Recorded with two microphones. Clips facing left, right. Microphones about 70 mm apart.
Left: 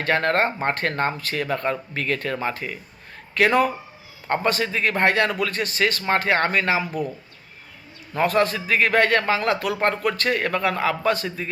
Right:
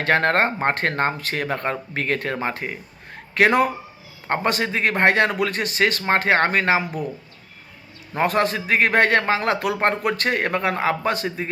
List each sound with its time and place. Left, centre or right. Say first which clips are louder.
0.0 s speech: right 2 dB; right
8.1 s speech: even; right